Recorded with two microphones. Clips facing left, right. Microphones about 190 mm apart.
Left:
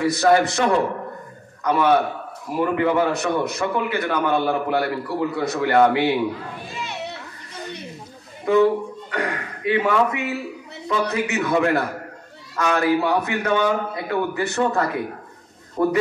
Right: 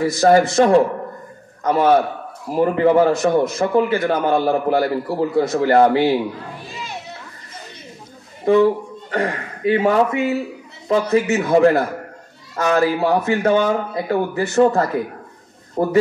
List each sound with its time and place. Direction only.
0.2 s a man's voice: 30° right (ahead or behind)
8.5 s a man's voice: 30° right (ahead or behind)